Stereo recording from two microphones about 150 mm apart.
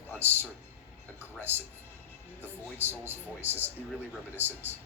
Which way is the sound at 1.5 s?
15° right (ahead or behind).